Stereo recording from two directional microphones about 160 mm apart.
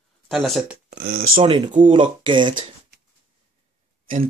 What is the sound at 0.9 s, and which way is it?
Speech, 65° right (ahead or behind).